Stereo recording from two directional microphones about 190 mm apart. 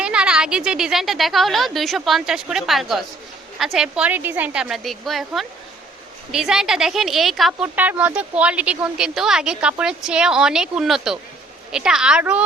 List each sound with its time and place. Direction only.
0.0 s speech: 5° right (ahead or behind)